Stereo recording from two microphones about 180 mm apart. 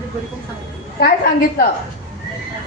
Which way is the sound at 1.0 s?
55° left (ahead or behind).